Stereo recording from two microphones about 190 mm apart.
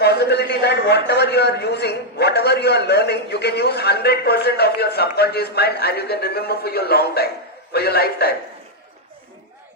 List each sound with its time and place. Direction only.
0.0 s a man's voice: 60° left (ahead or behind)